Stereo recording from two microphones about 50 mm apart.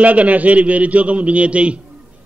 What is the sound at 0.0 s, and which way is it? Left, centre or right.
A man's voice, right.